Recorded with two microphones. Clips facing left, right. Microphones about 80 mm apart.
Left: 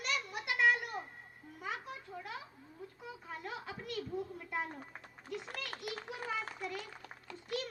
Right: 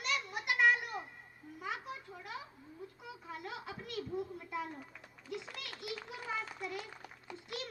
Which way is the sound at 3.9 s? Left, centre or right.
Centre.